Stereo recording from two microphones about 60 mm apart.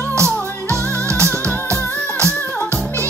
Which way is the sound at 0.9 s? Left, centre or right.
Right.